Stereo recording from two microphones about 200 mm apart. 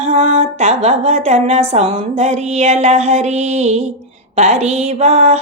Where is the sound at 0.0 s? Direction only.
35° right (ahead or behind).